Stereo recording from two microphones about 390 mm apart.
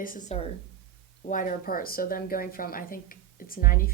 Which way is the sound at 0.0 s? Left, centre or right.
Centre.